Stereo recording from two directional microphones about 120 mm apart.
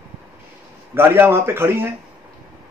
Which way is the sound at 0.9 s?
20° right (ahead or behind).